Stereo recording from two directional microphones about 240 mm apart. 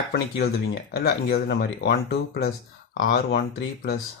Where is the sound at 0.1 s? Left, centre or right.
Left.